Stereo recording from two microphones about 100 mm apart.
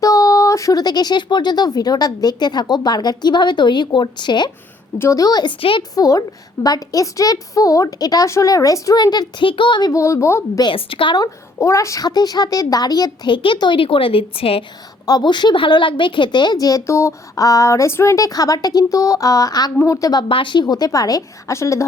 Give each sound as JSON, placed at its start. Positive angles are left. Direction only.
{"t": 0.0, "sound": "a woman's voice", "side_deg": 35}
{"t": 4.9, "sound": "a woman's voice", "side_deg": 30}
{"t": 5.5, "sound": "a woman's voice", "side_deg": 65}
{"t": 5.9, "sound": "a woman's voice", "side_deg": 35}
{"t": 9.4, "sound": "a woman's voice", "side_deg": 55}
{"t": 9.9, "sound": "speech", "side_deg": 30}
{"t": 10.6, "sound": "a woman's voice", "side_deg": 60}
{"t": 11.2, "sound": "a woman's voice", "side_deg": 30}
{"t": 13.3, "sound": "a woman's voice", "side_deg": 55}
{"t": 15.0, "sound": "a woman's voice", "side_deg": 45}
{"t": 20.2, "sound": "a woman's voice", "side_deg": 55}